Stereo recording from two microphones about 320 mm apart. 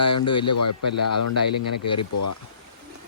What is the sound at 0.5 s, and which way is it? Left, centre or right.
Speech, left.